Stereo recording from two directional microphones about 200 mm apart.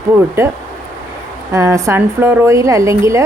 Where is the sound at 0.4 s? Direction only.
15° right (ahead or behind).